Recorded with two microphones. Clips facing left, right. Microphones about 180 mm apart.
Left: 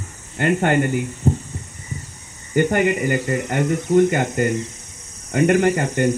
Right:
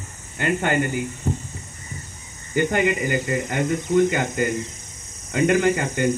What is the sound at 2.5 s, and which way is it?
Speech, 55° left (ahead or behind).